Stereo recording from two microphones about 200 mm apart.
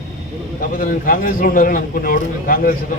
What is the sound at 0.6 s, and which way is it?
A man's voice, 45° left (ahead or behind).